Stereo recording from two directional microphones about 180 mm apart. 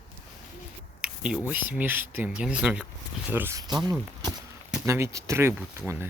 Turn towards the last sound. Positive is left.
turn(degrees=-15)  # may be behind; listen again after turning